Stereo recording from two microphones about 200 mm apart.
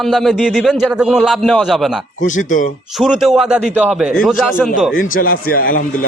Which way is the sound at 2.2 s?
40° left (ahead or behind).